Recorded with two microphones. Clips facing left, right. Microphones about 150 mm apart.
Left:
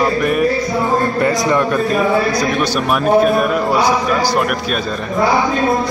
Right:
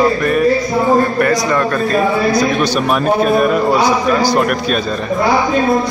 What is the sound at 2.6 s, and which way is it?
Speech, 5° left (ahead or behind).